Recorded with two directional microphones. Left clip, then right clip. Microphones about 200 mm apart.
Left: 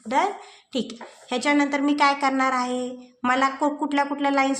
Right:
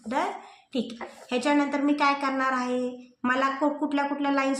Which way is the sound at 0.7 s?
40° left (ahead or behind).